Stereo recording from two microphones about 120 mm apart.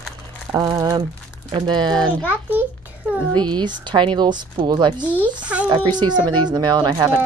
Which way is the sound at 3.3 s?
35° right (ahead or behind).